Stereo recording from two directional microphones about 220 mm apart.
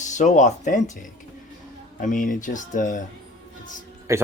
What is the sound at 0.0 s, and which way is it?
Speech, 35° left (ahead or behind).